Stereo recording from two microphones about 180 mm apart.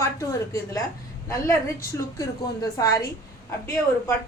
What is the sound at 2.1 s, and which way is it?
A woman's voice, 20° left (ahead or behind).